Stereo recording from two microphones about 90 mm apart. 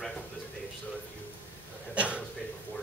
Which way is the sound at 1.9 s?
15° right (ahead or behind).